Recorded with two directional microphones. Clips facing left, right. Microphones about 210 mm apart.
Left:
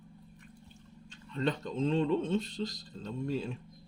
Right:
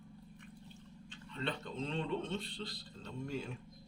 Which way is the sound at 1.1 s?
40° left (ahead or behind).